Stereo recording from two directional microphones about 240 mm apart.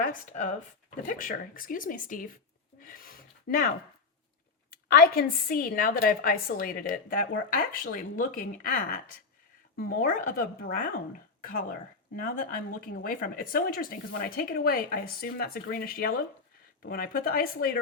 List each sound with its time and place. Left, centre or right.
0.0 s a woman's voice: left
2.8 s a sound: left
4.7 s a woman's voice: left
12.2 s a woman's voice: left